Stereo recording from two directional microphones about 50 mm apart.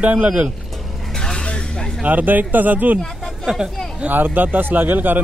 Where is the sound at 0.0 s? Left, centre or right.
Right.